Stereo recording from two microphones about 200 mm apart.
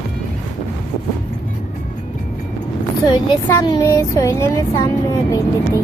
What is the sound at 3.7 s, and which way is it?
Speech, 15° left (ahead or behind).